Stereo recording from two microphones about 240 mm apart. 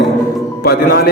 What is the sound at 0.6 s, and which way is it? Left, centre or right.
Speech, left.